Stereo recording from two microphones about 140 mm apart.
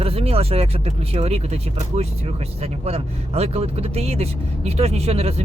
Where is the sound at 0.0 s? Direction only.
45° right (ahead or behind).